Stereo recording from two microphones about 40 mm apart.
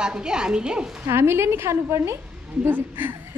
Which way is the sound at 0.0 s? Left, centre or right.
Right.